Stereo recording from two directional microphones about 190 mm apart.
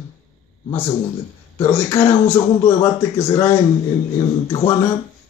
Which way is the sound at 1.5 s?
10° left (ahead or behind).